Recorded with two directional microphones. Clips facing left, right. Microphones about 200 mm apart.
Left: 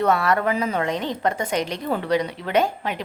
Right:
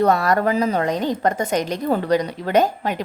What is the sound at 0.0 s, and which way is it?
A woman's voice, 40° right (ahead or behind).